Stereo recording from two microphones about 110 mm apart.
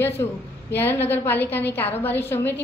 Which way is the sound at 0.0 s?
20° left (ahead or behind).